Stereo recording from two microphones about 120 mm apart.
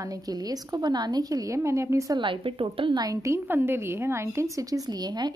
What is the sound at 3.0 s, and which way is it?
A woman's voice, 25° right (ahead or behind).